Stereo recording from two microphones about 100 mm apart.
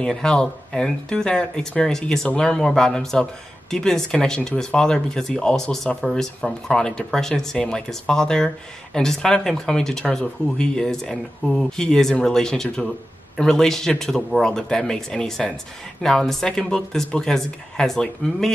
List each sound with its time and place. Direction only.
0.0 s speech: 5° left (ahead or behind)